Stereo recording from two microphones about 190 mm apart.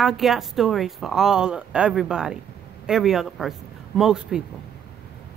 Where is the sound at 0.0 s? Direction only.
Centre (ahead or behind).